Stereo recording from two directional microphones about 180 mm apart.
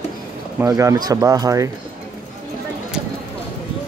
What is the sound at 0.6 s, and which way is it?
Speech, 15° right (ahead or behind).